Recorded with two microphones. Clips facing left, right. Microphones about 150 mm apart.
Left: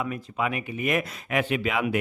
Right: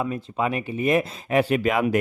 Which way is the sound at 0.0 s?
30° right (ahead or behind).